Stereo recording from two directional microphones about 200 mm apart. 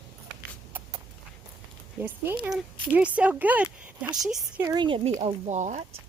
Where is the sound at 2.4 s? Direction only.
5° right (ahead or behind).